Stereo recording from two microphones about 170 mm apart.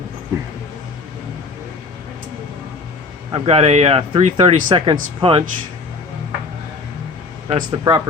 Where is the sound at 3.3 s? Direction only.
35° right (ahead or behind).